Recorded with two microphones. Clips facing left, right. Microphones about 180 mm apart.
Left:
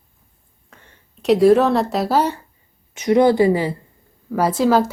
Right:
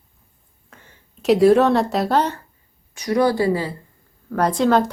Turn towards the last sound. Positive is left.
turn(degrees=5)  # may be behind; listen again after turning